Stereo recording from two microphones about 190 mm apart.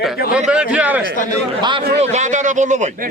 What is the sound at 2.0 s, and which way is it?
A man's voice, 40° right (ahead or behind).